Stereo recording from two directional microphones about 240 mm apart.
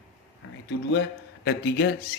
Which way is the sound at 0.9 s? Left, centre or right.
Left.